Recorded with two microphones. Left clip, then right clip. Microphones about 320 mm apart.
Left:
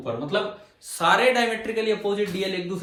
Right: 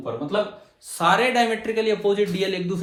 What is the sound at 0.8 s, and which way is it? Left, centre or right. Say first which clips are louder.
A man's voice: even; centre.